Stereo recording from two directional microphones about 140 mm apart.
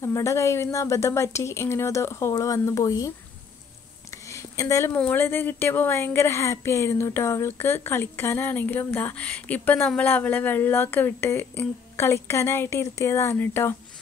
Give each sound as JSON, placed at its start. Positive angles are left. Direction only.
{"t": 0.0, "sound": "a woman's voice", "side_deg": 20}
{"t": 4.1, "sound": "a sound", "side_deg": 20}
{"t": 4.9, "sound": "a woman's voice", "side_deg": 10}